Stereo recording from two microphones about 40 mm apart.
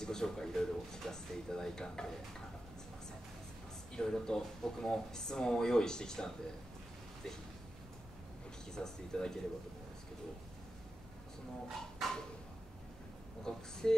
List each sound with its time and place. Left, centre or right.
0.0 s speech: centre
3.9 s speech: centre
8.7 s speech: centre
12.0 s a sound: centre
13.4 s speech: centre